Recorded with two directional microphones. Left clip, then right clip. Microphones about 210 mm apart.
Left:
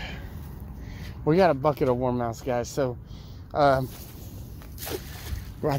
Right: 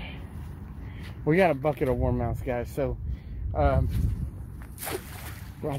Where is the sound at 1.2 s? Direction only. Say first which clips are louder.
Left 2 dB; 10° left (ahead or behind).